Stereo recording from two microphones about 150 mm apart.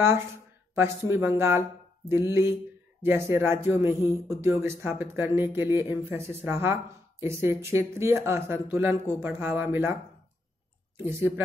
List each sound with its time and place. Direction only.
0.0 s speech: 15° right (ahead or behind)
3.0 s speech: 15° right (ahead or behind)
11.1 s speech: 15° right (ahead or behind)